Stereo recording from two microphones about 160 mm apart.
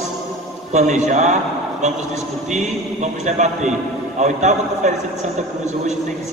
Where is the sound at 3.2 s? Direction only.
50° right (ahead or behind).